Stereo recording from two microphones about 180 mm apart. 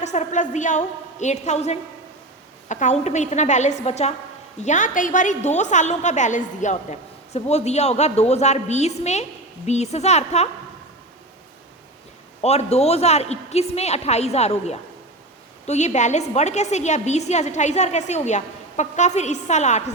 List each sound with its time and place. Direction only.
0.0 s a woman's voice: 40° left (ahead or behind)
12.4 s a woman's voice: 35° left (ahead or behind)